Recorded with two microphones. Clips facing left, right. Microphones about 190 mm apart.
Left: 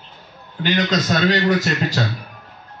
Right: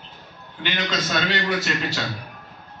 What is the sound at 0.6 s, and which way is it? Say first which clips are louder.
Speech: left 7 dB; 40° left (ahead or behind).